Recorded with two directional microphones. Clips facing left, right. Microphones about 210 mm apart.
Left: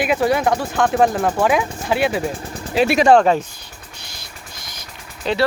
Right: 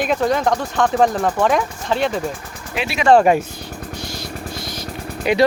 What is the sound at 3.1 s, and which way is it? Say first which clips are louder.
Speech: right 4 dB; 10° right (ahead or behind).